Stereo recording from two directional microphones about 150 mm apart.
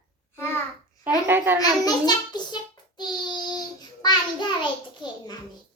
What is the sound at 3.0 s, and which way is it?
Child singing, 30° left (ahead or behind).